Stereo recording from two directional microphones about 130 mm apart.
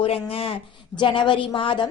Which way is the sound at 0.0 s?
50° left (ahead or behind).